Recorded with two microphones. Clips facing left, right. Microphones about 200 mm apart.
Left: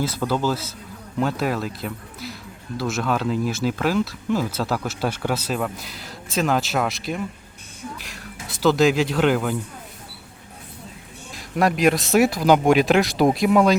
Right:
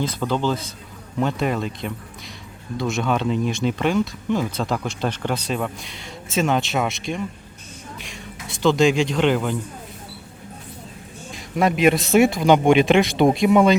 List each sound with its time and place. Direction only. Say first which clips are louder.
0.0 s a man's voice: even; 5° left (ahead or behind)
11.3 s speech: right 1 dB; centre (ahead or behind)